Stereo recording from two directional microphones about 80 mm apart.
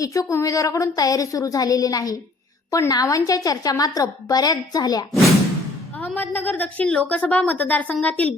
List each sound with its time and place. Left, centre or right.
0.0 s a woman's voice: left
6.1 s a woman's voice: left